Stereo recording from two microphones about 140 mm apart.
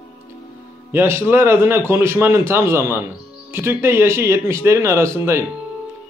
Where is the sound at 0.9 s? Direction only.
15° right (ahead or behind).